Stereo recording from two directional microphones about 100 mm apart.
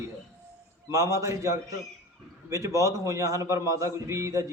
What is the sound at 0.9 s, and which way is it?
A man's voice, 30° right (ahead or behind).